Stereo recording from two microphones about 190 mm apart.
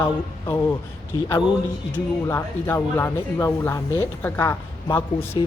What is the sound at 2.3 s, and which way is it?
Speech, 10° left (ahead or behind).